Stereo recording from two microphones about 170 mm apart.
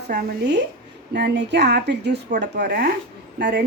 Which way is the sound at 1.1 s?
85° right.